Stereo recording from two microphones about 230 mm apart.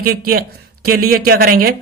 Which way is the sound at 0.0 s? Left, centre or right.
Right.